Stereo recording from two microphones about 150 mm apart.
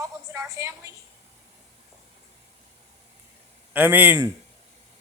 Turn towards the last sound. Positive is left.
turn(degrees=-10)  # may be behind; listen again after turning